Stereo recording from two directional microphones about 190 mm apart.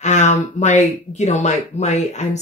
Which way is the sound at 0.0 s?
40° left (ahead or behind).